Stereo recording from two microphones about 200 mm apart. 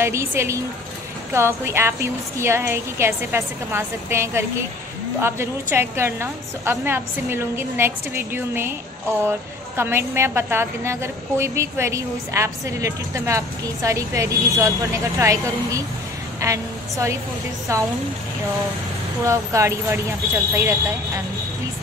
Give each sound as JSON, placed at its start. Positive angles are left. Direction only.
{"t": 0.0, "sound": "a woman's voice", "side_deg": -15}
{"t": 9.8, "sound": "a woman's voice", "side_deg": -10}
{"t": 19.2, "sound": "a woman's voice", "side_deg": -15}